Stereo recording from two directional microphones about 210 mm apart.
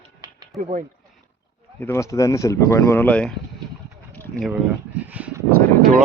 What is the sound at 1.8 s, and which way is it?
Speech, 15° left (ahead or behind).